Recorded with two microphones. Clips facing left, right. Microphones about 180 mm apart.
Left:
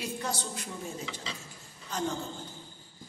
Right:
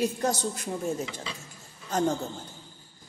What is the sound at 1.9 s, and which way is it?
Speech, 45° right (ahead or behind).